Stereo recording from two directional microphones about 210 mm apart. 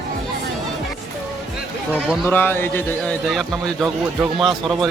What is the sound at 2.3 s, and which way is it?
A man's voice, 10° left (ahead or behind).